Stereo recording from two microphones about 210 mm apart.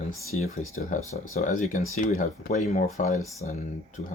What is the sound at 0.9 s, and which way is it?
Speech, 35° left (ahead or behind).